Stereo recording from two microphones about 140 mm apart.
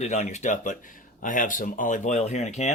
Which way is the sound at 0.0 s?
55° left (ahead or behind).